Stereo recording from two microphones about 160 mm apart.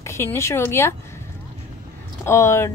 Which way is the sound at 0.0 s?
15° left (ahead or behind).